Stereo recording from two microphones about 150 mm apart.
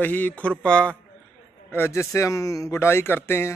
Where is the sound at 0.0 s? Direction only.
10° left (ahead or behind).